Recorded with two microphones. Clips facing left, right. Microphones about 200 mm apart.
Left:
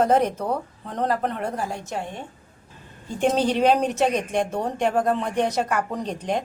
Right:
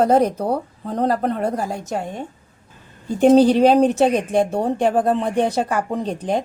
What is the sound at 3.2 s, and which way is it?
A woman's voice, 35° right (ahead or behind).